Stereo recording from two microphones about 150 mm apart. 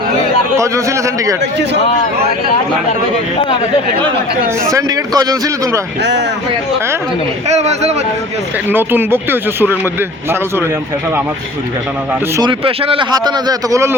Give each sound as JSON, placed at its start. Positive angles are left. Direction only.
{"t": 0.5, "sound": "a man's voice", "side_deg": -20}
{"t": 4.6, "sound": "a man's voice", "side_deg": -25}
{"t": 7.4, "sound": "a man's voice", "side_deg": -50}
{"t": 8.7, "sound": "speech", "side_deg": -15}
{"t": 12.4, "sound": "a man's voice", "side_deg": -35}